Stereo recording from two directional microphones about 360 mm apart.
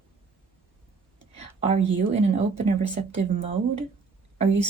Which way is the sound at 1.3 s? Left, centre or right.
Centre.